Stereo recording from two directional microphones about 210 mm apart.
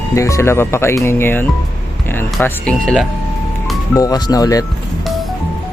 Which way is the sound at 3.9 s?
15° left (ahead or behind).